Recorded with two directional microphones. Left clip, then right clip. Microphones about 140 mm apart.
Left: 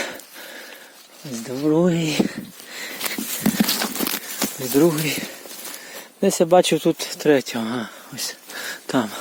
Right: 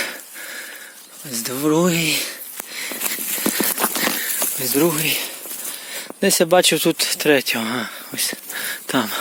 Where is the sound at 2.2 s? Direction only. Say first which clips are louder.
Even; 60° left (ahead or behind).